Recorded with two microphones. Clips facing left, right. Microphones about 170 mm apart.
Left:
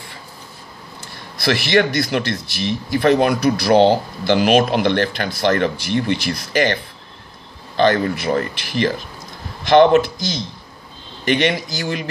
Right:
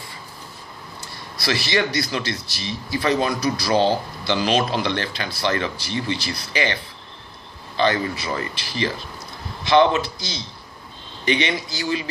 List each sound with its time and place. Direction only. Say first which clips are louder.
1.3 s speech: left 6 dB; 55° left (ahead or behind)